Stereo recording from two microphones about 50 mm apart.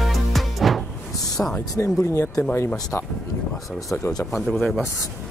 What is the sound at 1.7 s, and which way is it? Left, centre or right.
Speech, left.